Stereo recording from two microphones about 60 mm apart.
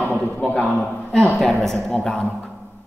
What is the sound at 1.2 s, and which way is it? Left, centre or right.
Speech, centre.